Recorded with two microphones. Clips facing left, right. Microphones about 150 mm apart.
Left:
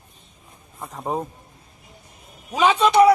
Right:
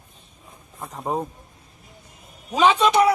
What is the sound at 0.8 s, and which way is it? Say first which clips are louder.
Speech: even; centre (ahead or behind).